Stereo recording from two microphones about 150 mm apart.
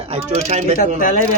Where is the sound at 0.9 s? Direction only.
65° left (ahead or behind).